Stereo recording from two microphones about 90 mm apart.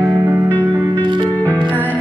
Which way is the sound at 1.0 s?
60° right (ahead or behind).